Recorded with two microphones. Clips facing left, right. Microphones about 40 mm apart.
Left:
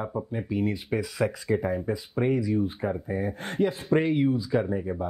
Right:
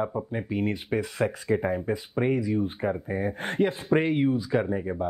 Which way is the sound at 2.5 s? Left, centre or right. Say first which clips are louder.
Even; right.